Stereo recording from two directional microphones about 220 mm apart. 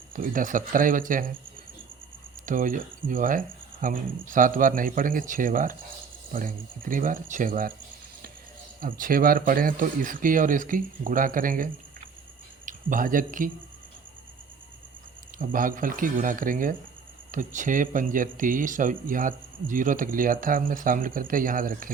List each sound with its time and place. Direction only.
0.2 s speech: 40° right (ahead or behind)
2.5 s speech: 40° right (ahead or behind)
8.8 s speech: 40° right (ahead or behind)
15.4 s speech: 40° right (ahead or behind)